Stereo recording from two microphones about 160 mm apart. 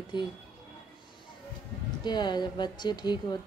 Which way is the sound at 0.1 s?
30° left (ahead or behind).